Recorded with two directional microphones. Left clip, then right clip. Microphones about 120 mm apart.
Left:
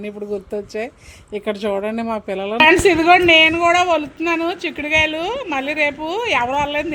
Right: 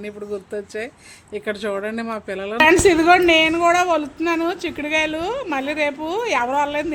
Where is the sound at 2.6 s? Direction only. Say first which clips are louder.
Left 1 dB; centre (ahead or behind).